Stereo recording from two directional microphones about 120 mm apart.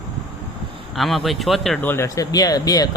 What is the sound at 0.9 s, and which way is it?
Speech, centre (ahead or behind).